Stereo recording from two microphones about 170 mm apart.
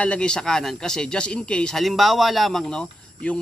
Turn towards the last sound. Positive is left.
turn(degrees=5)  # may be behind; listen again after turning